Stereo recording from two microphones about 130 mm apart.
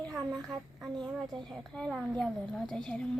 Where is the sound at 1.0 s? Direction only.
Centre (ahead or behind).